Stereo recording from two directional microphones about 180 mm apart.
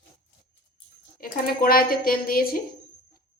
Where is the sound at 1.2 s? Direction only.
55° left (ahead or behind).